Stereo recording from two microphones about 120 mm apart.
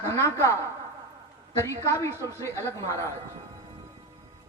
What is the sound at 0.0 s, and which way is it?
Speech, 20° left (ahead or behind).